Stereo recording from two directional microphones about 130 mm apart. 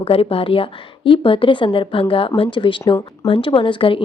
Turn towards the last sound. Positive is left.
turn(degrees=40)  # may be behind; listen again after turning